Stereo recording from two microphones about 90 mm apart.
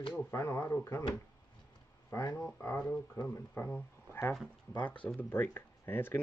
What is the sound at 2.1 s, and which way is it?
Speech, 40° left (ahead or behind).